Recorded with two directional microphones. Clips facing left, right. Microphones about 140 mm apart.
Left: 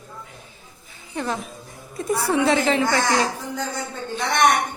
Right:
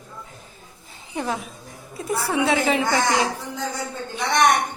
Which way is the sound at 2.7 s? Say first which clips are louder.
Even; 15° right (ahead or behind).